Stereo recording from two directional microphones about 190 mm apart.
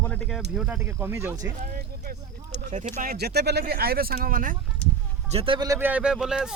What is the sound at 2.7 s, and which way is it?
Speech, 35° right (ahead or behind).